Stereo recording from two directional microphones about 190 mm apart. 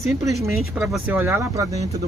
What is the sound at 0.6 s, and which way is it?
Speech, 5° right (ahead or behind).